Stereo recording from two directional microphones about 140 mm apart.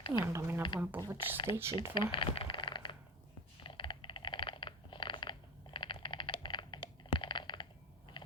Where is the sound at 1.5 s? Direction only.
20° right (ahead or behind).